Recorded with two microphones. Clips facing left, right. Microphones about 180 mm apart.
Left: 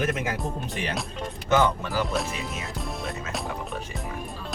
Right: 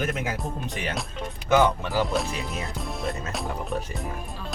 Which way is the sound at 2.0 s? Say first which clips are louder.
Right 2 dB; centre (ahead or behind).